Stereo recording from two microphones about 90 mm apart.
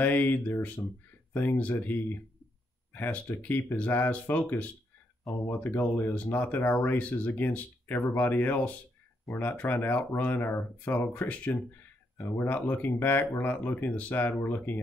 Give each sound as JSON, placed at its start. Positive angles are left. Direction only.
{"t": 0.0, "sound": "speech", "side_deg": 20}